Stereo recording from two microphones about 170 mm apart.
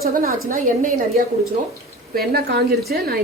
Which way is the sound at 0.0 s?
60° right (ahead or behind).